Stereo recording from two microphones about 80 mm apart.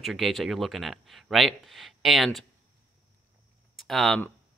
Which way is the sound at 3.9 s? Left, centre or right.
Centre.